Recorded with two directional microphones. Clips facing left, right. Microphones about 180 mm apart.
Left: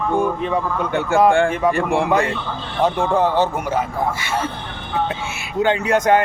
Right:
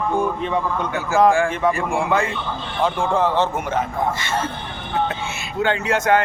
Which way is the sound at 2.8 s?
40° left (ahead or behind).